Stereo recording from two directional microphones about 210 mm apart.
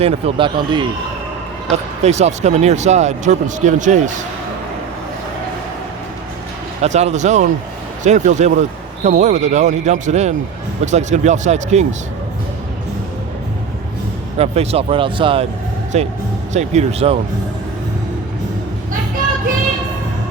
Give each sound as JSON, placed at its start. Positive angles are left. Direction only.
{"t": 0.0, "sound": "speech", "side_deg": -30}
{"t": 1.7, "sound": "speech", "side_deg": -30}
{"t": 6.8, "sound": "speech", "side_deg": -35}
{"t": 14.3, "sound": "speech", "side_deg": -30}